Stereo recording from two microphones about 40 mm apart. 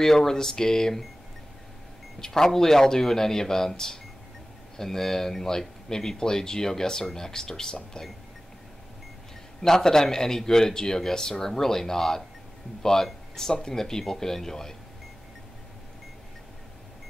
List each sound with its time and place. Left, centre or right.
0.0 s a man's voice: centre
2.1 s a man's voice: centre
9.6 s a man's voice: centre